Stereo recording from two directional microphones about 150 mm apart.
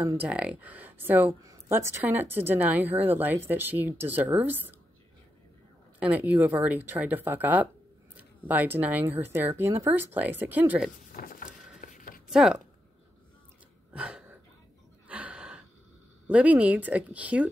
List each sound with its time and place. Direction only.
0.0 s a woman's voice: 15° right (ahead or behind)
5.9 s a woman's voice: 10° right (ahead or behind)
11.1 s a sound: 70° left (ahead or behind)
11.8 s writing: 65° left (ahead or behind)
12.3 s speech: 5° right (ahead or behind)
13.9 s a sound: 5° right (ahead or behind)
16.3 s a woman's voice: 10° right (ahead or behind)